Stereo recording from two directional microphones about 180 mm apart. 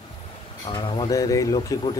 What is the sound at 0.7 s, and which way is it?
Speech, 25° left (ahead or behind).